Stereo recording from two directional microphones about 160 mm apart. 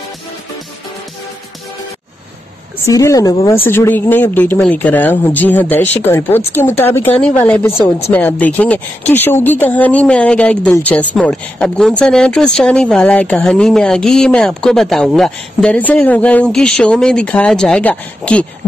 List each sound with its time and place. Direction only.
2.8 s speech: 20° left (ahead or behind)